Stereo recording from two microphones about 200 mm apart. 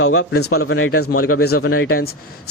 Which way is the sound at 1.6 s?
80° left.